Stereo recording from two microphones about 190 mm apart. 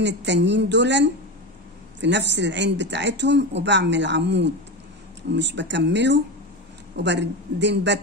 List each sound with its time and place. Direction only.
0.0 s speech: 70° right (ahead or behind)